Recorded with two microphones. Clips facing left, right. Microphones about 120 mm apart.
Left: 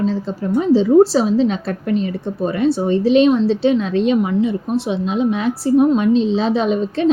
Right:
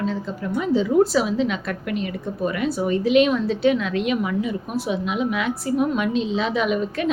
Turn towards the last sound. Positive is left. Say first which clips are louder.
# left 6 dB
turn(degrees=30)  # may be behind; listen again after turning